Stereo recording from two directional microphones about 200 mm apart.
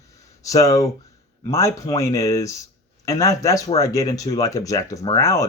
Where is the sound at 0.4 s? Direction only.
15° left (ahead or behind).